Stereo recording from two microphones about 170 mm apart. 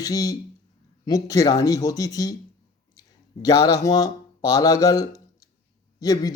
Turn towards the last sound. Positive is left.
turn(degrees=20)  # may be behind; listen again after turning